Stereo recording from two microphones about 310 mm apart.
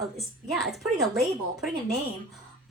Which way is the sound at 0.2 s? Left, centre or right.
Centre.